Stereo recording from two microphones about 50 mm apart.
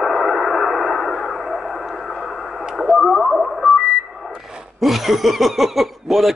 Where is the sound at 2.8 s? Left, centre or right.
Centre.